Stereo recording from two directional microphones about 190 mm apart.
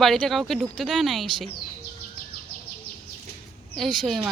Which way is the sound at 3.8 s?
Centre (ahead or behind).